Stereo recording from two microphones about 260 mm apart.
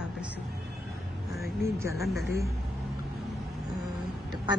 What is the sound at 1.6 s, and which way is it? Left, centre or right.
Speech, centre.